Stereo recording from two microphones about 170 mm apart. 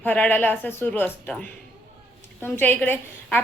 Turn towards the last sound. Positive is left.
turn(degrees=10)  # may be behind; listen again after turning